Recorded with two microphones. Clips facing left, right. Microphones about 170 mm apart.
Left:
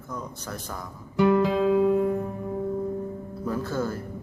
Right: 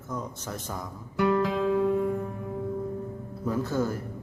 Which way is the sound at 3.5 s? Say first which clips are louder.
Right 1 dB; 15° right (ahead or behind).